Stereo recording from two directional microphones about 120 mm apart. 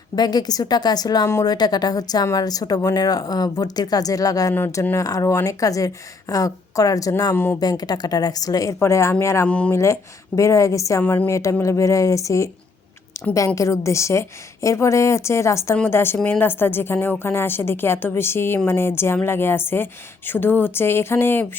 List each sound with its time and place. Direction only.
0.2 s a woman's voice: 35° left (ahead or behind)
7.3 s speech: 15° left (ahead or behind)
7.6 s a woman's voice: 35° left (ahead or behind)
9.5 s speech: 10° left (ahead or behind)
9.7 s a woman's voice: 25° left (ahead or behind)
11.0 s speech: 10° left (ahead or behind)
11.3 s a woman's voice: 25° left (ahead or behind)